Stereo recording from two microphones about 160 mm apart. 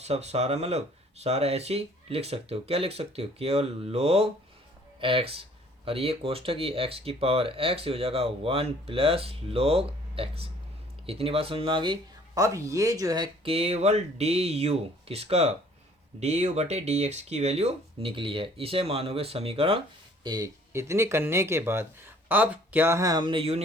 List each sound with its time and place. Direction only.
0.0 s speech: 40° right (ahead or behind)
20.2 s speech: 25° right (ahead or behind)